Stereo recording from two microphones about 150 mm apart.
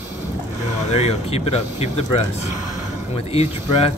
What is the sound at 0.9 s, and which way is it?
Speech, 45° left (ahead or behind).